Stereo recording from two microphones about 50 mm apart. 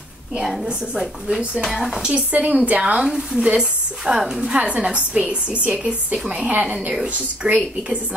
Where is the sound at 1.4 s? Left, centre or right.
Centre.